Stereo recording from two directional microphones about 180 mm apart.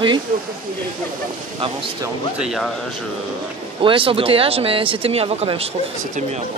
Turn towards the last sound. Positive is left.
turn(degrees=-30)  # may be behind; listen again after turning